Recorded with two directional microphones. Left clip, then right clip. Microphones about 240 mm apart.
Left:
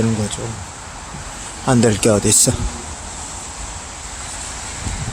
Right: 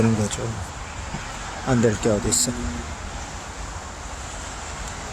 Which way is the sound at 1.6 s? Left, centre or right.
Centre.